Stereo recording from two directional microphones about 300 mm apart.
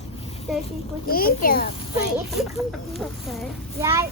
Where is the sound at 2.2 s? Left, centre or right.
Centre.